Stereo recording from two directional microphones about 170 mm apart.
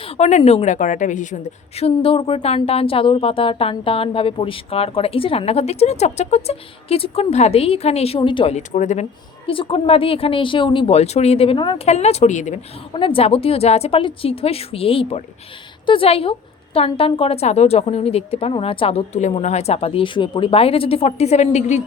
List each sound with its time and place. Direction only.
0.0 s a woman's voice: 45° left (ahead or behind)
8.5 s speech: 45° left (ahead or behind)
9.5 s a woman's voice: 30° left (ahead or behind)
11.9 s a woman's voice: 40° left (ahead or behind)
12.9 s a woman's voice: 30° left (ahead or behind)